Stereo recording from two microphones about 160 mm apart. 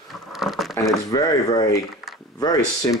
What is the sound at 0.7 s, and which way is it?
Speech, 20° left (ahead or behind).